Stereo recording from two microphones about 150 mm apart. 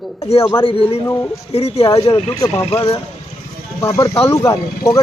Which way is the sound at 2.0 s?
25° left (ahead or behind).